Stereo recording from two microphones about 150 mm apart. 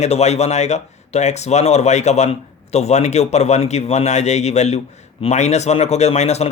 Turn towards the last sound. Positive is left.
turn(degrees=45)  # may be behind; listen again after turning